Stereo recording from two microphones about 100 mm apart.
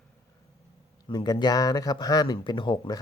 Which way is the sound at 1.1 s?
45° left (ahead or behind).